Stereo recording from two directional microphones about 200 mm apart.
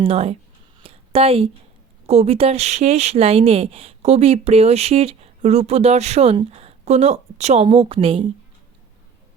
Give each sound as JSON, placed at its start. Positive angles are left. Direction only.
{"t": 0.0, "sound": "speech", "side_deg": -30}
{"t": 0.8, "sound": "a sound", "side_deg": -30}
{"t": 2.0, "sound": "speech", "side_deg": -30}